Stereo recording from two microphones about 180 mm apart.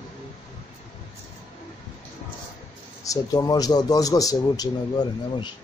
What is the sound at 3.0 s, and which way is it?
A man's voice, 20° left (ahead or behind).